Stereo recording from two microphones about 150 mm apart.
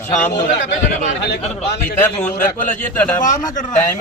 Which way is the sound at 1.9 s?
10° left (ahead or behind).